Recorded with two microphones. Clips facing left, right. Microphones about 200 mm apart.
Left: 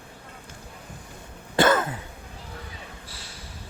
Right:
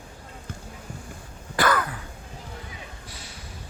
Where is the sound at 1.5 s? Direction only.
25° left (ahead or behind).